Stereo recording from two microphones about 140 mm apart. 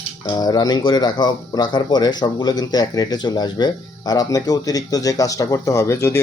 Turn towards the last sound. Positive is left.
turn(degrees=20)  # may be behind; listen again after turning